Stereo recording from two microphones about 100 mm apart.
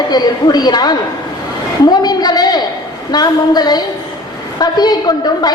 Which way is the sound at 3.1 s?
45° left (ahead or behind).